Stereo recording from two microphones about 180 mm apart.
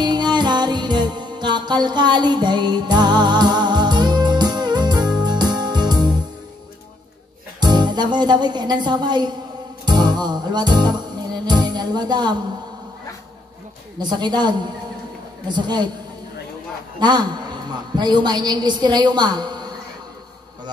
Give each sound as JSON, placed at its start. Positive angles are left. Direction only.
{"t": 0.0, "sound": "music", "side_deg": -25}
{"t": 7.6, "sound": "a woman's voice", "side_deg": -25}
{"t": 9.8, "sound": "music", "side_deg": -25}
{"t": 13.9, "sound": "a woman's voice", "side_deg": -25}
{"t": 17.0, "sound": "a woman's voice", "side_deg": -25}